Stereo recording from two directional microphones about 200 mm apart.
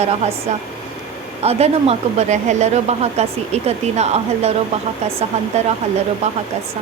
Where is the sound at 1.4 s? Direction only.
30° right (ahead or behind).